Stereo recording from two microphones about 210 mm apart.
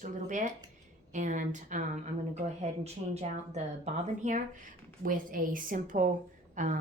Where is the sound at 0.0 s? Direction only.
35° right (ahead or behind).